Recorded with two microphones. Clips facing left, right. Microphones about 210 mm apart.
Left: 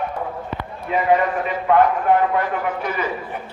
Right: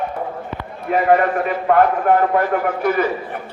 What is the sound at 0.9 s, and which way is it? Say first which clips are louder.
A man's voice: right 3 dB; 55° right (ahead or behind).